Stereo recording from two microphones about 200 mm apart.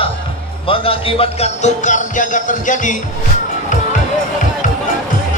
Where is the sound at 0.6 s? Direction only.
25° left (ahead or behind).